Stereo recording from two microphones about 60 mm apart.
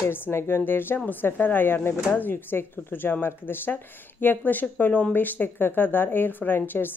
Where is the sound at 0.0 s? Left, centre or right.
Left.